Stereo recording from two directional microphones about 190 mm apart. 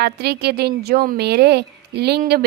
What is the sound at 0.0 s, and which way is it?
A woman's voice, 60° right (ahead or behind).